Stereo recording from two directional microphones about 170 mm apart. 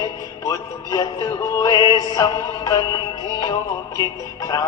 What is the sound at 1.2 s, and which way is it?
Music, 20° left (ahead or behind).